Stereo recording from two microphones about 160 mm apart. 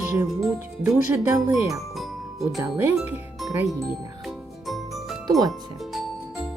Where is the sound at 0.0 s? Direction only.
15° right (ahead or behind).